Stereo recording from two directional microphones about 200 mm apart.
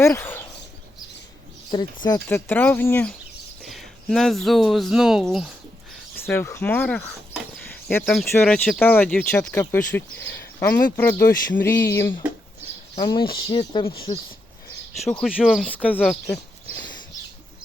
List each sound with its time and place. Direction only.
0.0 s speech: 10° left (ahead or behind)
1.7 s speech: 20° left (ahead or behind); by 5.5 s centre (ahead or behind)
6.2 s a sound: 15° left (ahead or behind)
7.9 s speech: 5° left (ahead or behind)
11.3 s a sound: 45° left (ahead or behind)
11.6 s speech: 10° left (ahead or behind)
13.0 s speech: 25° left (ahead or behind)
15.2 s speech: 5° right (ahead or behind)